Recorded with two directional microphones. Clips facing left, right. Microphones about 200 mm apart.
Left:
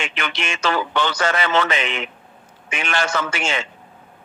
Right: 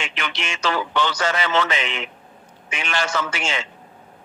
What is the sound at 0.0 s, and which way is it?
Speech, 55° left (ahead or behind).